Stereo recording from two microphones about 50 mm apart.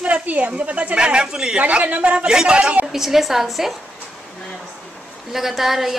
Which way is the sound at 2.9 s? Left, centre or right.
Centre.